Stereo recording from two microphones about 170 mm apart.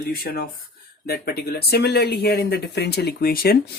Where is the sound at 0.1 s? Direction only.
65° left (ahead or behind).